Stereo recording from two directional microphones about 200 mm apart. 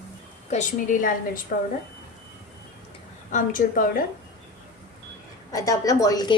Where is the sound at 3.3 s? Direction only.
40° left (ahead or behind).